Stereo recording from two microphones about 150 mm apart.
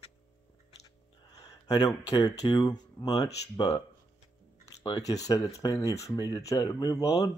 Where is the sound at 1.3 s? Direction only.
25° left (ahead or behind).